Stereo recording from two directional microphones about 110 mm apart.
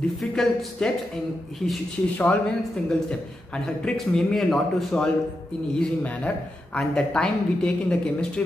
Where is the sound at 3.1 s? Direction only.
5° left (ahead or behind).